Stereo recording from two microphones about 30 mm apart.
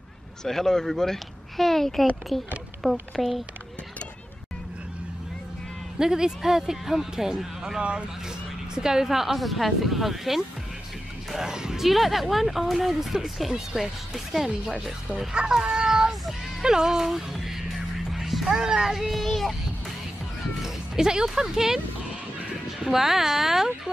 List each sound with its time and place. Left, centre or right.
0.4 s speech: centre
5.9 s speech: centre
9.4 s speech: centre
11.4 s speech: right
11.8 s speech: centre
15.3 s speech: right
15.9 s child singing: centre
16.6 s speech: centre
17.0 s music: centre
18.5 s speech: right
18.9 s speech: centre
19.2 s speech: centre
20.6 s speech: centre
22.8 s speech: centre